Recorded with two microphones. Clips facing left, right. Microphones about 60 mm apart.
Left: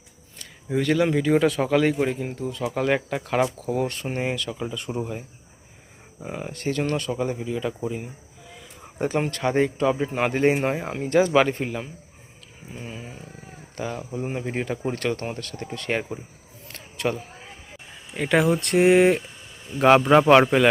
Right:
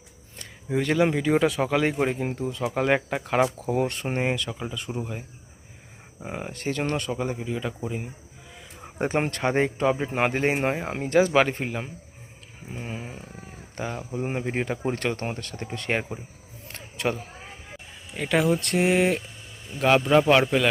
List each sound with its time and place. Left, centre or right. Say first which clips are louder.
0.8 s speech: left 1 dB; right
2.1 s speech: right 1 dB; right; by 3.5 s centre
3.6 s speech: even; right; by 4.9 s centre
6.1 s speech: left 1 dB; centre
9.0 s speech: even; right
11.3 s speech: left 2 dB; centre
12.7 s speech: right 2 dB; right
13.7 s speech: left 1 dB; centre
16.6 s a sound: left 1 dB; centre
18.1 s speech: left 2 dB; centre
18.8 s a man's voice: left 7 dB; centre